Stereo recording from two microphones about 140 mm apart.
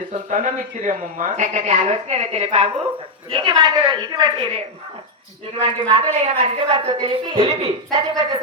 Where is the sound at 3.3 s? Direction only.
35° right (ahead or behind).